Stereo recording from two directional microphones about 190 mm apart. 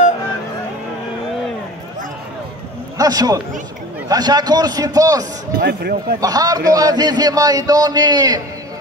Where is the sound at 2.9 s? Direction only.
20° right (ahead or behind).